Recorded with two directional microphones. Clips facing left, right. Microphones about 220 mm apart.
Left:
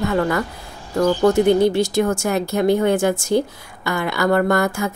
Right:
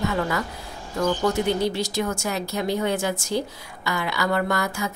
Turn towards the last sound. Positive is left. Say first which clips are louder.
# left 7 dB
turn(degrees=50)  # may be behind; listen again after turning